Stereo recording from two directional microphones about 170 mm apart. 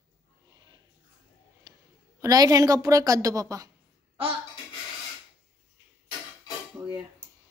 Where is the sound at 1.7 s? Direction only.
20° right (ahead or behind).